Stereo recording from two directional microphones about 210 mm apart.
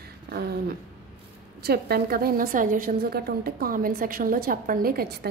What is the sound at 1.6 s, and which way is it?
A woman's voice, 45° right (ahead or behind).